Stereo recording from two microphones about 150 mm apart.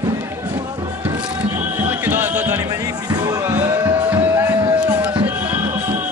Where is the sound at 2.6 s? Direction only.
25° right (ahead or behind).